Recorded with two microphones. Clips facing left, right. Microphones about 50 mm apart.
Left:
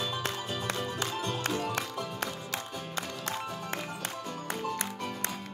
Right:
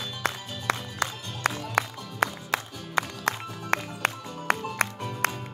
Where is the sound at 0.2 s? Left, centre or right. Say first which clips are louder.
Right 2 dB; right.